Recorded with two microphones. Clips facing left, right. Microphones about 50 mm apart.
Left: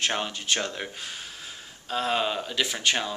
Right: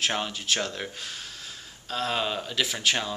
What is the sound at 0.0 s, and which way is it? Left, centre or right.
Speech, centre.